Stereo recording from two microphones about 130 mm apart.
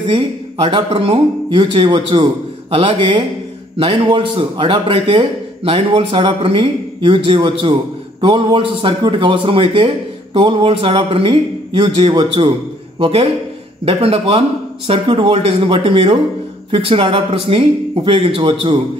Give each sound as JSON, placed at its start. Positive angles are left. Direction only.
{"t": 0.6, "sound": "speech", "side_deg": -60}
{"t": 0.9, "sound": "a man's voice", "side_deg": -45}
{"t": 13.0, "sound": "speech", "side_deg": -50}